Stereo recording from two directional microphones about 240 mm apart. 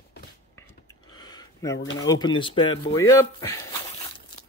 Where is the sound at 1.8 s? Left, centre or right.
Left.